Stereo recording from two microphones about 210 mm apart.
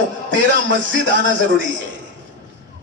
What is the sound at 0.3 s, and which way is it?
A man's voice, 60° right (ahead or behind).